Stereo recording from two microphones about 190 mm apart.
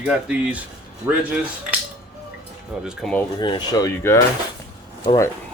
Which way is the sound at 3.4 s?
25° left (ahead or behind).